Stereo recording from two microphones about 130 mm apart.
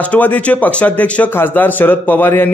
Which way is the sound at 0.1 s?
10° left (ahead or behind).